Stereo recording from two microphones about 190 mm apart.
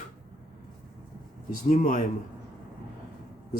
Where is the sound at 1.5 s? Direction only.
45° left (ahead or behind).